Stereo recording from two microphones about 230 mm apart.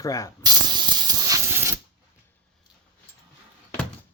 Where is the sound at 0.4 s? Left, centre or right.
Centre.